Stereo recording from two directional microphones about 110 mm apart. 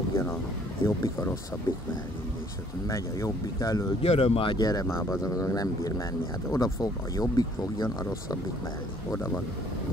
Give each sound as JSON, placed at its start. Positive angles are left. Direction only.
{"t": 0.1, "sound": "a sound", "side_deg": 20}
{"t": 0.8, "sound": "speech", "side_deg": 25}
{"t": 2.9, "sound": "speech", "side_deg": 30}
{"t": 4.0, "sound": "speech", "side_deg": 65}
{"t": 4.6, "sound": "speech", "side_deg": 35}